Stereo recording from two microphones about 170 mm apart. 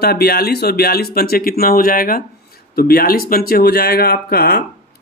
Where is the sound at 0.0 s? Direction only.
65° left (ahead or behind).